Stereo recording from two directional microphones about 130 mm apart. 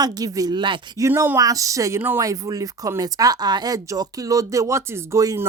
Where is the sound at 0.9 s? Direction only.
25° right (ahead or behind).